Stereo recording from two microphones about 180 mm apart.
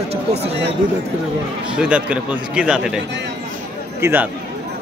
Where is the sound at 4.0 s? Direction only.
15° right (ahead or behind).